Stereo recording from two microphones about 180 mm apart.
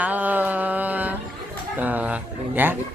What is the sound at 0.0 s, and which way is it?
Mantra, 10° right (ahead or behind).